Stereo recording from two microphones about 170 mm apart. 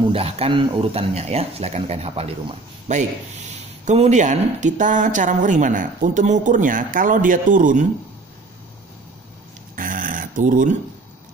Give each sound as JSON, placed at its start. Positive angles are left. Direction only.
{"t": 0.1, "sound": "speech", "side_deg": -35}
{"t": 9.8, "sound": "dog", "side_deg": -50}